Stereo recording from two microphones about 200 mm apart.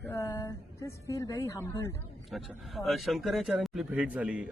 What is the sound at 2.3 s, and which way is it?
A man's voice, centre (ahead or behind).